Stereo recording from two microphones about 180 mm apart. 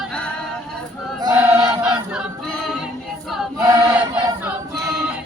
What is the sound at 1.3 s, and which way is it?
Choir, 5° right (ahead or behind).